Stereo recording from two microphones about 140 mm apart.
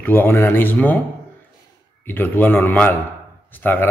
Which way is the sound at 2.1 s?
15° left (ahead or behind).